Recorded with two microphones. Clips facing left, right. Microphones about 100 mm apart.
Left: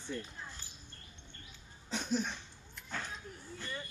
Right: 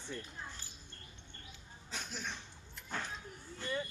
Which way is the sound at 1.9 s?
20° left (ahead or behind).